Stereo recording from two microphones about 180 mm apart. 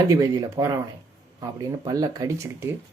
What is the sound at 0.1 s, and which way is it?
Speech, 20° right (ahead or behind).